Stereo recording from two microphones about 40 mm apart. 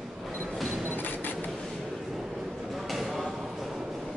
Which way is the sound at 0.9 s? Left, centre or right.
Left.